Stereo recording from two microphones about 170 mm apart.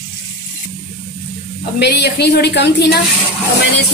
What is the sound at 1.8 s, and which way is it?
A woman's voice, 75° left (ahead or behind).